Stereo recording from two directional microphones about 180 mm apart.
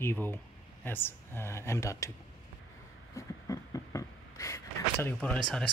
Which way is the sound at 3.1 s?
20° left (ahead or behind).